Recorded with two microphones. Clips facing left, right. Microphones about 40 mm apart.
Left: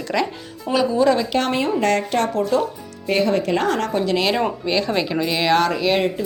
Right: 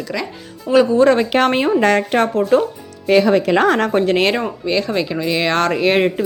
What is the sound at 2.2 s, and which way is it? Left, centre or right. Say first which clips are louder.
Speech: right 3 dB; centre.